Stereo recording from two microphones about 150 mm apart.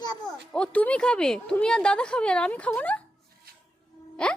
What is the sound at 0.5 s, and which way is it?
Speech, 10° left (ahead or behind).